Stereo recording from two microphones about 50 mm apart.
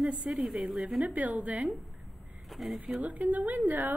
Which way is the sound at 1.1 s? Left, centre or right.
Right.